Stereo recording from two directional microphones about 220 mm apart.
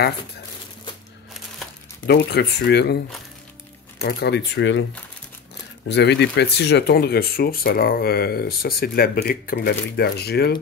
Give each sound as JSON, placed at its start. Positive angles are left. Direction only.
{"t": 2.0, "sound": "speech", "side_deg": 50}
{"t": 4.0, "sound": "speech", "side_deg": 50}
{"t": 5.9, "sound": "speech", "side_deg": 50}